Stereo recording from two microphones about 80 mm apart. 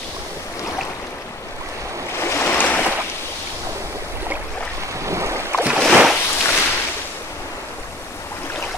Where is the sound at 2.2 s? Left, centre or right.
Left.